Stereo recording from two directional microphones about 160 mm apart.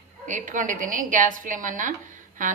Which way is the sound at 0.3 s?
50° right (ahead or behind).